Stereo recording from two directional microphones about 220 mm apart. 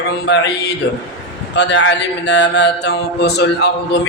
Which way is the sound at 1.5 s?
55° left (ahead or behind).